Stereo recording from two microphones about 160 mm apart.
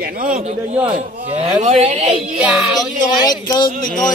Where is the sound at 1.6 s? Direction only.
40° right (ahead or behind).